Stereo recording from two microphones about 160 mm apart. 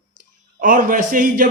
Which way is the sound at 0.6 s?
55° right (ahead or behind).